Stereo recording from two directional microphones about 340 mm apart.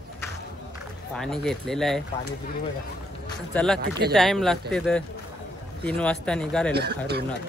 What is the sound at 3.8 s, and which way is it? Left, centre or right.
Speech, right.